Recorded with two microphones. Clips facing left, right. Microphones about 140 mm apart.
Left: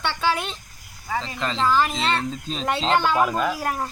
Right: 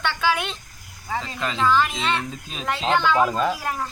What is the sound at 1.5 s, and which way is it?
Speech, 30° left (ahead or behind).